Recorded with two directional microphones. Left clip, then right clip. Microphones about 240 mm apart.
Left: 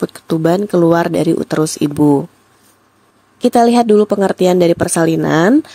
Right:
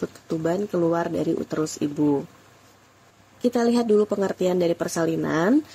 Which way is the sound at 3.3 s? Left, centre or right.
Left.